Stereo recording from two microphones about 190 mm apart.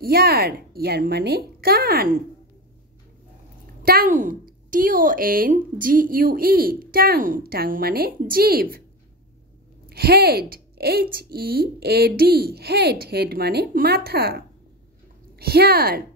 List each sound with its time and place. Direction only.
0.0 s a woman's voice: 55° right (ahead or behind)
3.8 s a woman's voice: 50° right (ahead or behind)
9.8 s a woman's voice: 55° right (ahead or behind)